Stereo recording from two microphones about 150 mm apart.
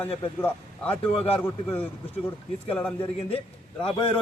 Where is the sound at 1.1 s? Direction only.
40° left (ahead or behind).